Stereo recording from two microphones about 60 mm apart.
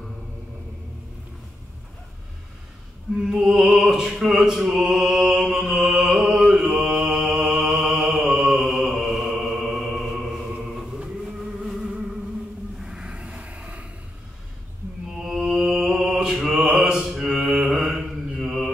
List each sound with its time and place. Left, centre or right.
3.2 s opera: centre
8.2 s mantra: centre
10.5 s music: centre
12.7 s a sound: centre
15.2 s mantra: centre